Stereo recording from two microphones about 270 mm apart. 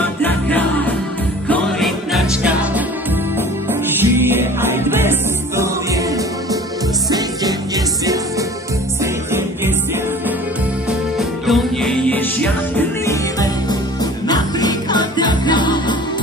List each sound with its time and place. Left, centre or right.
0.2 s music: centre
4.0 s music: centre
10.9 s music: centre